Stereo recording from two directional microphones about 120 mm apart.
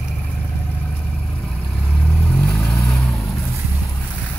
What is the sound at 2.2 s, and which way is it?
Vehicle, 5° left (ahead or behind).